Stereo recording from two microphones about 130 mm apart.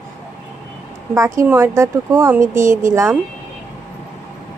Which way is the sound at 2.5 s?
80° right.